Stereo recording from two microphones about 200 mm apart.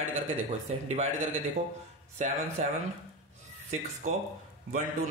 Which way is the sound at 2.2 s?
35° right (ahead or behind).